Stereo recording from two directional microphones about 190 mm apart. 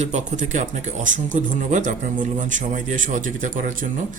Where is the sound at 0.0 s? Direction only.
40° right (ahead or behind).